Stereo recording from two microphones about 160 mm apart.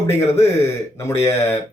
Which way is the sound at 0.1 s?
15° left (ahead or behind).